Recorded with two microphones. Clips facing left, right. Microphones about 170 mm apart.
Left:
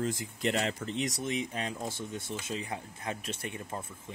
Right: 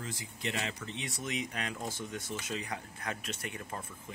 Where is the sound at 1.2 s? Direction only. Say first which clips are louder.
Left 3 dB; 30° left (ahead or behind).